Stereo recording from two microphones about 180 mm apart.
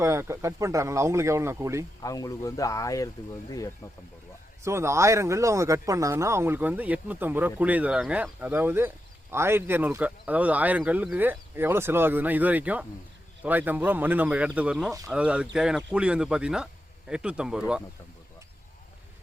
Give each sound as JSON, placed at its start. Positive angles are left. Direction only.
{"t": 0.0, "sound": "speech", "side_deg": -15}
{"t": 2.0, "sound": "speech", "side_deg": 20}
{"t": 4.6, "sound": "speech", "side_deg": -15}